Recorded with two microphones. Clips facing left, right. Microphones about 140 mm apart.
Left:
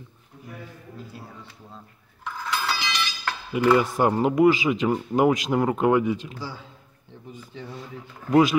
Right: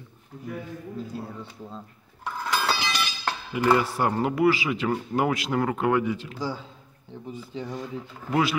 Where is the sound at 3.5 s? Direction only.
20° left (ahead or behind).